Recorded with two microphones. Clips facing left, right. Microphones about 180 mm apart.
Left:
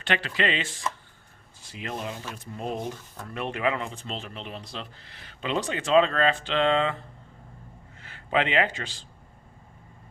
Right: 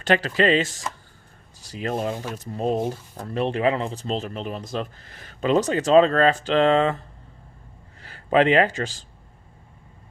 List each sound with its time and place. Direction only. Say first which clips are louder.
0.0 s speech: right 7 dB; 40° right (ahead or behind)
8.0 s a man's voice: right 8 dB; 40° right (ahead or behind)